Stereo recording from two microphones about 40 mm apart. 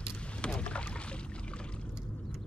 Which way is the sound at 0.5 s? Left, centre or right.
Left.